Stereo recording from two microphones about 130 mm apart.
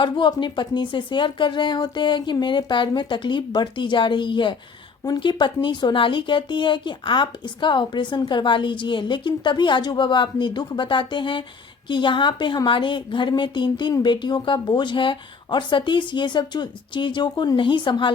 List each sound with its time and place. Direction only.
0.0 s a woman's voice: 35° left (ahead or behind)